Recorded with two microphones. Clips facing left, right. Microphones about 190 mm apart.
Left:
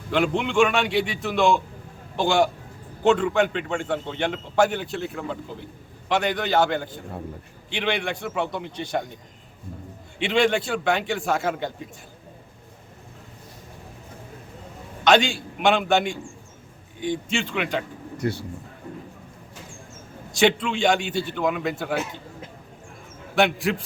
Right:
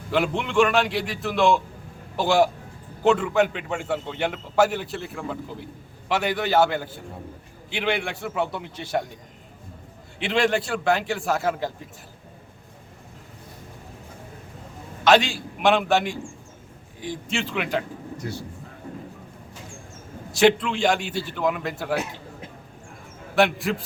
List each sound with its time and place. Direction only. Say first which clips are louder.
0.1 s a man's voice: left 1 dB; centre (ahead or behind)
10.2 s a man's voice: left 1 dB; centre (ahead or behind)
15.0 s a man's voice: even; centre (ahead or behind)
18.2 s speech: left 8 dB; 65° left (ahead or behind)
20.3 s a man's voice: right 2 dB; centre (ahead or behind)
23.3 s a man's voice: even; centre (ahead or behind)